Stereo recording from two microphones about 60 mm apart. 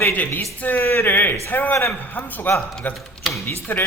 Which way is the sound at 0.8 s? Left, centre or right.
Left.